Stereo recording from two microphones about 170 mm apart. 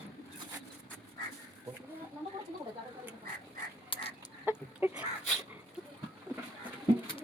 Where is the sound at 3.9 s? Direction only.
30° left (ahead or behind).